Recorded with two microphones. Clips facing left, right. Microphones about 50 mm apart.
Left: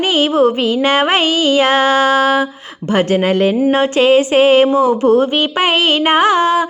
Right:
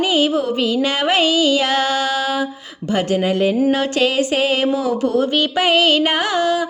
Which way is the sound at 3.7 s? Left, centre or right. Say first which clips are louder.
Left 6 dB; left.